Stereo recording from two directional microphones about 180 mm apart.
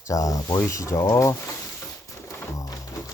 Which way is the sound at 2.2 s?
15° left (ahead or behind).